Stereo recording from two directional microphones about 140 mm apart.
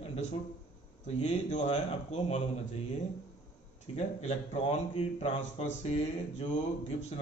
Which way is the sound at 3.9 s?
55° left (ahead or behind).